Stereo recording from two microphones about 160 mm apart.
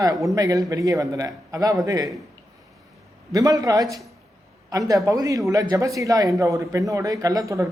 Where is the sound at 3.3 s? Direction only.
20° right (ahead or behind).